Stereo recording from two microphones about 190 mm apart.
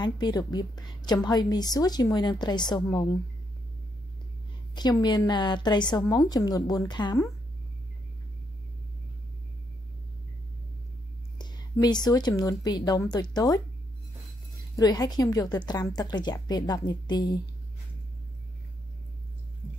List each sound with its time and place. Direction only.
0.0 s a woman's voice: 20° left (ahead or behind)
4.7 s a woman's voice: 20° left (ahead or behind)
11.3 s a woman's voice: 20° left (ahead or behind)
14.8 s a woman's voice: 20° left (ahead or behind)